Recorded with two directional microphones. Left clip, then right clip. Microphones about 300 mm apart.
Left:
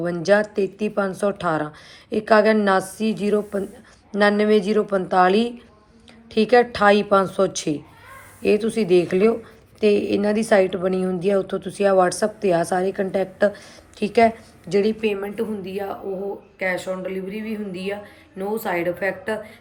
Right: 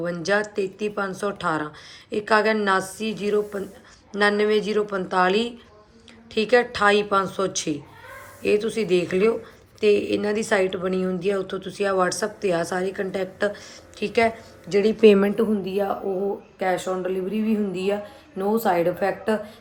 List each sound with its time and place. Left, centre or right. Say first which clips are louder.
0.0 s a woman's voice: left 5 dB; centre
15.0 s a woman's voice: right 9 dB; right
15.4 s a woman's voice: right 4 dB; centre